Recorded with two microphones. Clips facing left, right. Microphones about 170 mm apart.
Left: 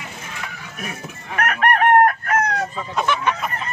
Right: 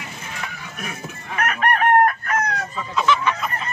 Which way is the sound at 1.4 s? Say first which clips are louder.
Left 2 dB; 65° left (ahead or behind).